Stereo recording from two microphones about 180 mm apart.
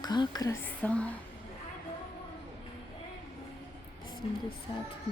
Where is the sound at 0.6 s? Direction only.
5° left (ahead or behind).